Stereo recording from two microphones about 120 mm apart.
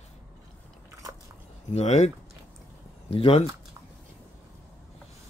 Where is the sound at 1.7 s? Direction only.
65° left (ahead or behind).